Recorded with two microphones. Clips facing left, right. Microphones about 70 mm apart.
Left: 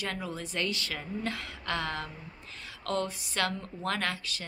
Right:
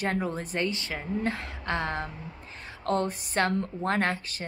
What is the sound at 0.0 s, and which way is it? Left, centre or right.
Speech, right.